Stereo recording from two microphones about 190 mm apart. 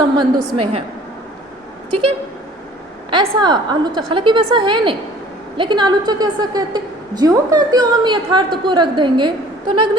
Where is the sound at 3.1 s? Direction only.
25° right (ahead or behind).